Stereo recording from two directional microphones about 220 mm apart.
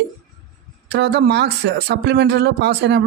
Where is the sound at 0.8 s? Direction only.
50° right (ahead or behind).